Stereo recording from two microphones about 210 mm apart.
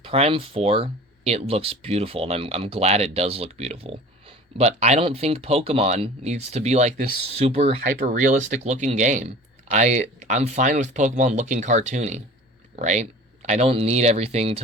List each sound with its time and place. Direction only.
0.0 s speech: 25° right (ahead or behind)